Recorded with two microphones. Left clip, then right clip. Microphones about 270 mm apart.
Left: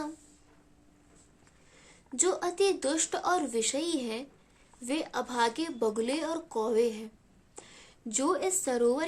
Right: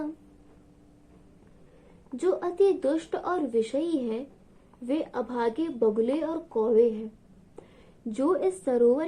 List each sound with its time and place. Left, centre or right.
2.1 s a woman's voice: left
8.1 s a woman's voice: left